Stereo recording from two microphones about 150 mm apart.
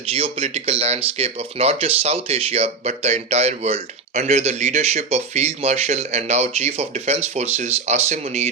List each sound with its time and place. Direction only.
0.1 s speech: 40° right (ahead or behind)